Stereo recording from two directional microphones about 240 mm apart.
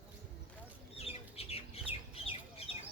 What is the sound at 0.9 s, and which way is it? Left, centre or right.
Chicken, left.